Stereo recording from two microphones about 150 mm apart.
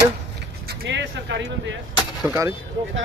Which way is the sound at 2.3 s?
20° right (ahead or behind).